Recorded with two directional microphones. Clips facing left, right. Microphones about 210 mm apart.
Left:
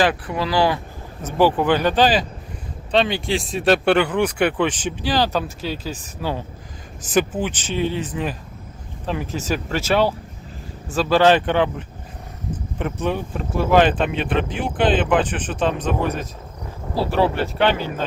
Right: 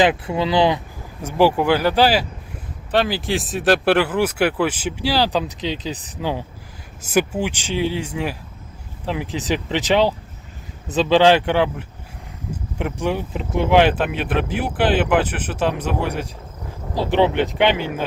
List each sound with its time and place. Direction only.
0.0 s speech: 25° right (ahead or behind)